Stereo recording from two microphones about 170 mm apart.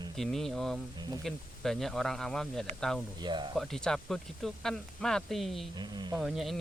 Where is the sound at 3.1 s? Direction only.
25° right (ahead or behind).